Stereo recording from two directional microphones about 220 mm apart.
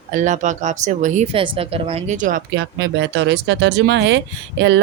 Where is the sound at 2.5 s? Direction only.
50° right (ahead or behind).